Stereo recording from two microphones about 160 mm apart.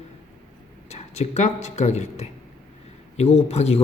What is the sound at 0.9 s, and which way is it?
A man's voice, 45° left (ahead or behind).